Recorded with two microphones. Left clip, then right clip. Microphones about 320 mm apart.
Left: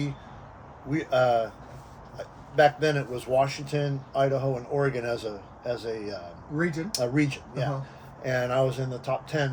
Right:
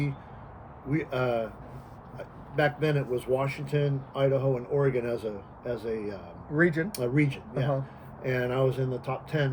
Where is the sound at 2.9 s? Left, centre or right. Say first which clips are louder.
Left 3 dB; left.